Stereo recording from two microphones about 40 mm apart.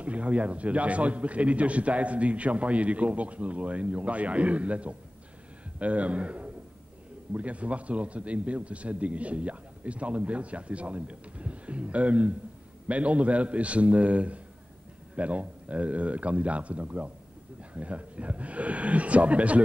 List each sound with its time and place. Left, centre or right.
0.0 s a man's voice: right